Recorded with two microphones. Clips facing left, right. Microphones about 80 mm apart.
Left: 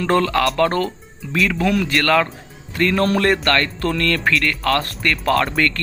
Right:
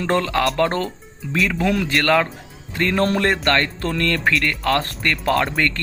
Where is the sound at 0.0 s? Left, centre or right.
Right.